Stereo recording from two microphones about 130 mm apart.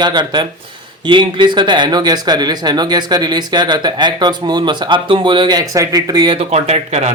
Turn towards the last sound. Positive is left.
turn(degrees=-55)  # may be behind; listen again after turning